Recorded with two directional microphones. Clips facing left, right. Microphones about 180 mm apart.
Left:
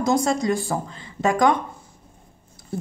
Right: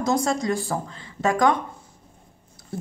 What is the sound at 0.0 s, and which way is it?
A woman's voice, 15° left (ahead or behind).